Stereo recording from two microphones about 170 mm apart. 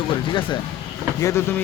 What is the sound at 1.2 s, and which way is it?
Speech, 15° left (ahead or behind).